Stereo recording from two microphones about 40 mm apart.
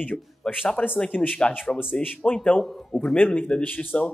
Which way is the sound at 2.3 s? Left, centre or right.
Left.